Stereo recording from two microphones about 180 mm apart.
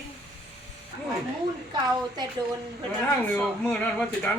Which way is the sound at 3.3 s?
5° left (ahead or behind).